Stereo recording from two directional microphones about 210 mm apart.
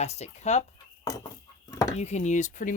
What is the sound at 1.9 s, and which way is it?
Speech, 30° left (ahead or behind).